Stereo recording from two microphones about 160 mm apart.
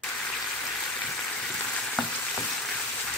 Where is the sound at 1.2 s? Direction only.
5° left (ahead or behind).